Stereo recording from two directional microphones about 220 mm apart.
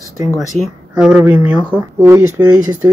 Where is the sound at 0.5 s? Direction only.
25° right (ahead or behind).